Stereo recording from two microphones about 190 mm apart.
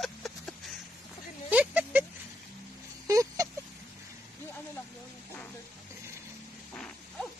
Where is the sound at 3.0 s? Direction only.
20° right (ahead or behind).